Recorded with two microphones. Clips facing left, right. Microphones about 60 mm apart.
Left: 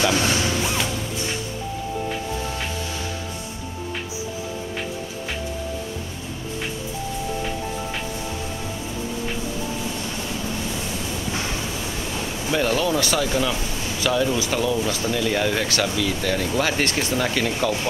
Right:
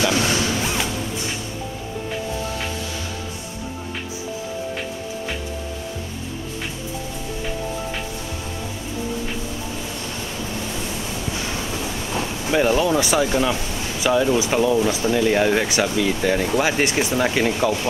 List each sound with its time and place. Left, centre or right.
12.4 s speech: centre